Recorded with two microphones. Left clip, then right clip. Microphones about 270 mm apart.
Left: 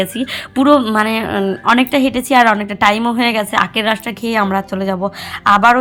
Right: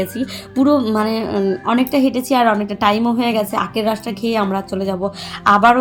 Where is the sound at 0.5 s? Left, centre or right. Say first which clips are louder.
Left 4 dB; left.